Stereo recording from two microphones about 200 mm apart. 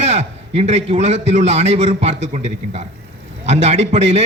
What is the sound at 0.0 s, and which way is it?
A man's voice, 30° right (ahead or behind).